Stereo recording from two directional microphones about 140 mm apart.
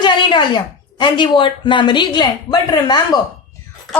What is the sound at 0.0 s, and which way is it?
A woman's voice, 30° left (ahead or behind).